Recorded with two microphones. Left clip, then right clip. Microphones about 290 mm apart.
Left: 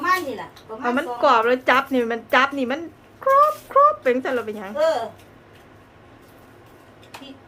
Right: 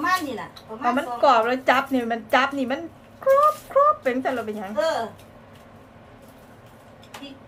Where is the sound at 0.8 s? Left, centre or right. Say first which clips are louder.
Even; centre.